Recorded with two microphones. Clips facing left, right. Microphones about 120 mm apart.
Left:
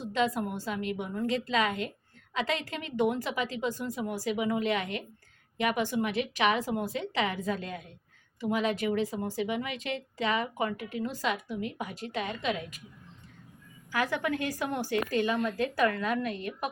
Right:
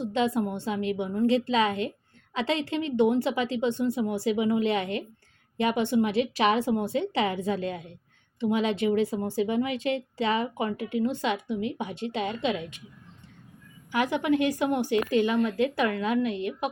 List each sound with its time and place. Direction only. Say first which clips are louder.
0.0 s speech: right 3 dB; 30° right (ahead or behind)
13.9 s speech: right 5 dB; 20° right (ahead or behind)